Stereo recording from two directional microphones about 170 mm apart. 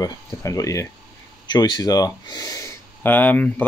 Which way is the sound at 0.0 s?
20° left (ahead or behind).